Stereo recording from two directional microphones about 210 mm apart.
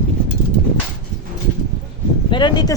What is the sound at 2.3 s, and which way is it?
Speech, 20° left (ahead or behind).